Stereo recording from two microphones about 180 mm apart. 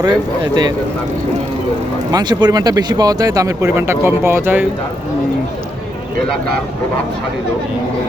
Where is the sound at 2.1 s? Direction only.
20° right (ahead or behind).